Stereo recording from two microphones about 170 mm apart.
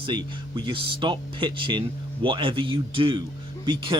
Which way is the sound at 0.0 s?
25° right (ahead or behind).